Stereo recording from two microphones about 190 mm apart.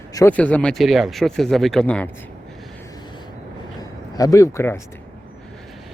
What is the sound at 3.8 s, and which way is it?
Speech, 20° left (ahead or behind).